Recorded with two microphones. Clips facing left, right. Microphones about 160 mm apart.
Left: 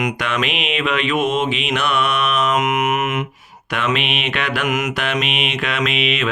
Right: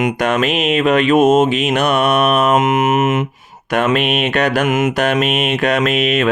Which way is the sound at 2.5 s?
30° right (ahead or behind).